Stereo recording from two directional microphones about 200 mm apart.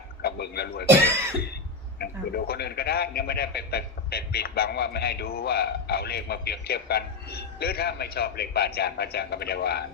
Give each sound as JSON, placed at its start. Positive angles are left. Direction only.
{"t": 0.2, "sound": "a man's voice", "side_deg": 50}
{"t": 2.0, "sound": "a man's voice", "side_deg": 50}